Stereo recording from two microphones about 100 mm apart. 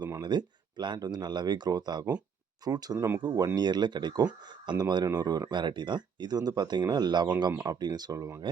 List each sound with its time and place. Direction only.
0.2 s speech: 50° right (ahead or behind)